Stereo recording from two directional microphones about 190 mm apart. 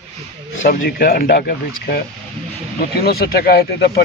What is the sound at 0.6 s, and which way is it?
Speech, 50° left (ahead or behind).